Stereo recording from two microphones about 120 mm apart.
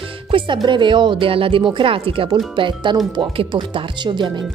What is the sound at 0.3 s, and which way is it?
A woman's voice, 40° right (ahead or behind).